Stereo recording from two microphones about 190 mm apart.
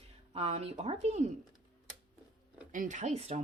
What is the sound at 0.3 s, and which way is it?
Speech, 35° right (ahead or behind).